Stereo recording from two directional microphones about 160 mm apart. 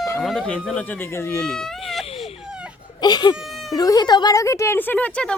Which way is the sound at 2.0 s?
40° left (ahead or behind).